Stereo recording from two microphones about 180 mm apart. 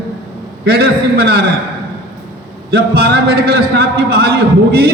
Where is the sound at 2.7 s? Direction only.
60° right (ahead or behind).